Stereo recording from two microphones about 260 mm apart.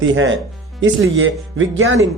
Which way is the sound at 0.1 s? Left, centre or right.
Right.